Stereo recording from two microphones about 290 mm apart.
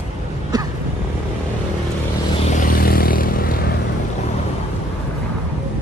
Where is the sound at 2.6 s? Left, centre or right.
Left.